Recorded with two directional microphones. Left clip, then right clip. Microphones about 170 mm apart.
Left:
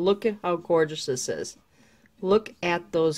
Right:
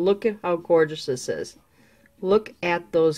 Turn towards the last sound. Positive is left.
turn(degrees=5)  # may be behind; listen again after turning